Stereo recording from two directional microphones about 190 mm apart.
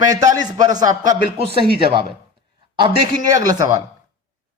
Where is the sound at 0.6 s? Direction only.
20° right (ahead or behind).